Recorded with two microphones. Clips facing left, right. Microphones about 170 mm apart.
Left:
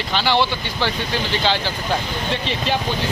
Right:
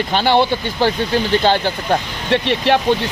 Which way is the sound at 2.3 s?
65° right (ahead or behind).